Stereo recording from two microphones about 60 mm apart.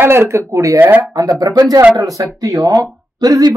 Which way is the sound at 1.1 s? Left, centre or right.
Right.